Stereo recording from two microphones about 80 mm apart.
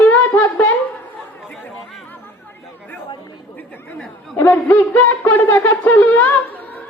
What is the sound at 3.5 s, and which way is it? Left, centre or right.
Chatter, left.